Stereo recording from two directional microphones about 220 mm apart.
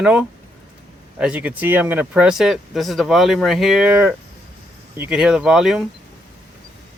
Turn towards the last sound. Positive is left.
turn(degrees=0)  # may be behind; listen again after turning